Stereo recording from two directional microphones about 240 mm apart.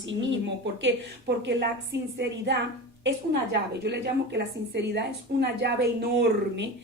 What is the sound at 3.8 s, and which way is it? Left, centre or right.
A woman's voice, right.